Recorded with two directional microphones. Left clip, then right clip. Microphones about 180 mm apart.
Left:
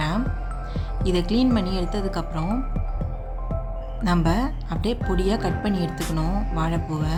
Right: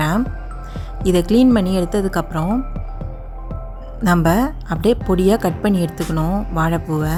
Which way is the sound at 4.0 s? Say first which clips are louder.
Right 8 dB; 40° right (ahead or behind).